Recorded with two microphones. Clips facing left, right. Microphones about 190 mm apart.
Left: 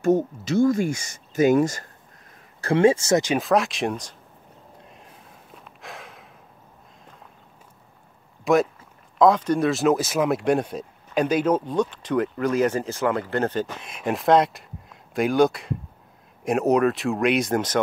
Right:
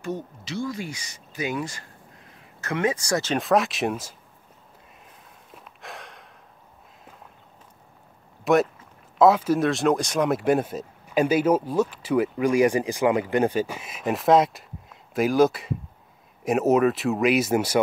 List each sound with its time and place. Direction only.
0.0 s speech: 45° left (ahead or behind)
2.6 s speech: 30° left (ahead or behind)
3.3 s speech: centre (ahead or behind)
5.0 s a sound: centre (ahead or behind)
8.5 s speech: centre (ahead or behind)